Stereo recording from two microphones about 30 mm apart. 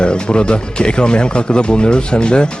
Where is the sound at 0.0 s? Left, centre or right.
Left.